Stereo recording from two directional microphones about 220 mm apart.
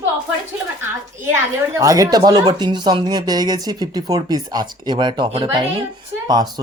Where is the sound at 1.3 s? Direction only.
15° right (ahead or behind).